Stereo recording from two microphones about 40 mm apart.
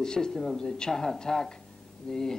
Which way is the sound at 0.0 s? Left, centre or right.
Centre.